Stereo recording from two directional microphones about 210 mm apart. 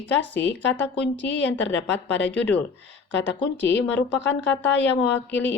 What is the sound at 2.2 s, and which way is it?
Speech, 10° left (ahead or behind).